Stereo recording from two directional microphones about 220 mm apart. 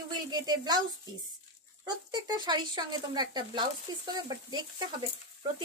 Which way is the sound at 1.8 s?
20° right (ahead or behind).